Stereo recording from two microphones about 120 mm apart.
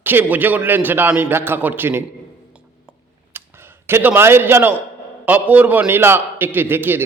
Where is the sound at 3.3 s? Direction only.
20° right (ahead or behind).